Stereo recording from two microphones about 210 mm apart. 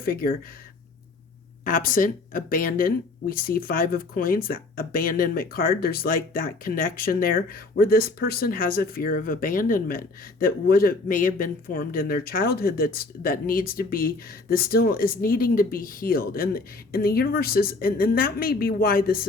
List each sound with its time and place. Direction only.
0.0 s speech: 45° left (ahead or behind)
1.6 s speech: 40° left (ahead or behind)